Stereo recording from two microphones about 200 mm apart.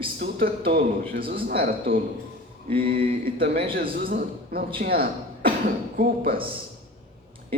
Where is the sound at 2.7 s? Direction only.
25° right (ahead or behind).